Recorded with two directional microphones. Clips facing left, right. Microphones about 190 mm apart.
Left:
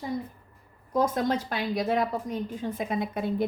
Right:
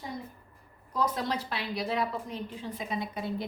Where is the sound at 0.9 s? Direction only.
50° left (ahead or behind).